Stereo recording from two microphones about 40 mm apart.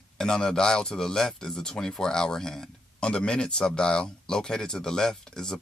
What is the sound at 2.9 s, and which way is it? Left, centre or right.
Speech, left.